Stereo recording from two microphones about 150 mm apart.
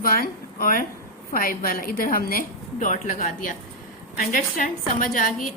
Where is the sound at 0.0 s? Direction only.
80° left; by 3.5 s 55° left (ahead or behind).